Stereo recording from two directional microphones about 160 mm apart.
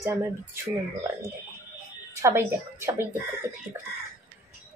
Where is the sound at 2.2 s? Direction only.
15° right (ahead or behind).